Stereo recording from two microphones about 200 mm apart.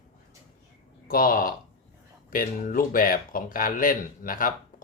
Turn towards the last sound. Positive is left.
turn(degrees=45)  # may be behind; listen again after turning